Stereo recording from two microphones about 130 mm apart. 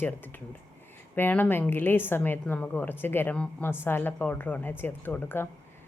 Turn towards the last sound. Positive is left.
turn(degrees=15)  # may be behind; listen again after turning